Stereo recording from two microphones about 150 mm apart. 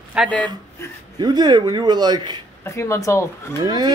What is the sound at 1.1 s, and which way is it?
A man's voice, 30° right (ahead or behind).